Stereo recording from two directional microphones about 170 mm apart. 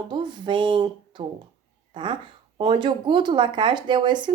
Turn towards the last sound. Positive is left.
turn(degrees=-25)  # may be behind; listen again after turning